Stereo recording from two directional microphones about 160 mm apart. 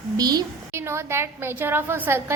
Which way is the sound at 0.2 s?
25° right (ahead or behind).